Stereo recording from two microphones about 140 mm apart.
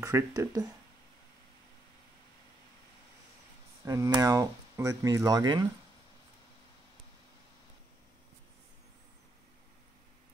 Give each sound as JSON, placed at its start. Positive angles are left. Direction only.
{"t": 0.0, "sound": "speech", "side_deg": -20}
{"t": 3.8, "sound": "speech", "side_deg": -25}